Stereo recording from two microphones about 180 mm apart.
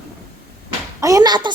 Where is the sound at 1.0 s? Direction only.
20° right (ahead or behind).